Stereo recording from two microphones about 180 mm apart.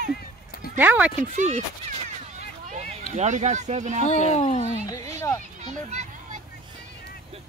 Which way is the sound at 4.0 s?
40° left (ahead or behind).